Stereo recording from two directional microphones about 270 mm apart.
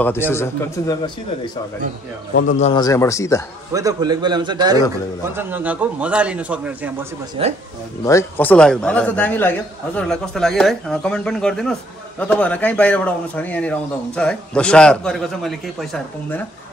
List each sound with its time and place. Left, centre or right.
0.3 s a man's voice: centre
3.7 s a man's voice: centre
7.4 s speech: centre
8.0 s a man's voice: centre